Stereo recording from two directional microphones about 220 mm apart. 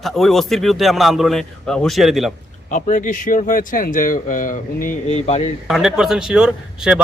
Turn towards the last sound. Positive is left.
turn(degrees=-5)  # may be behind; listen again after turning